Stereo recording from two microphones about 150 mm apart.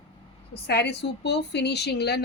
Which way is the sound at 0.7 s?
90° left.